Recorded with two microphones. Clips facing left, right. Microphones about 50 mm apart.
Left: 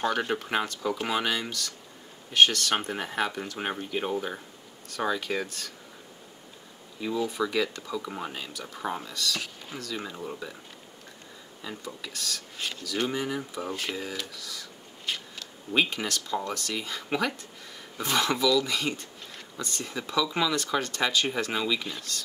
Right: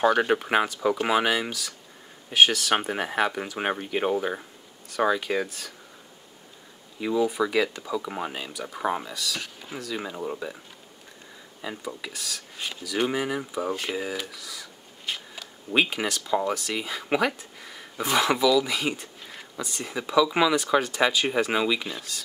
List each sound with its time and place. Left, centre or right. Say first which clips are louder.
0.0 s speech: right 6 dB; centre
7.0 s speech: right 4 dB; centre
11.6 s speech: right 4 dB; centre